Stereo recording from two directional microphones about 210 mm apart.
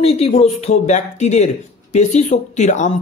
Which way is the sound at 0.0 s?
30° left (ahead or behind).